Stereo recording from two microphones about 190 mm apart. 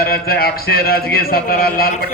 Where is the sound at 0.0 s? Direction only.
50° left (ahead or behind).